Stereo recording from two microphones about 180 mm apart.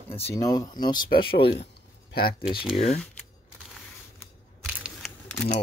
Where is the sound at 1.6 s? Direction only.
65° left (ahead or behind).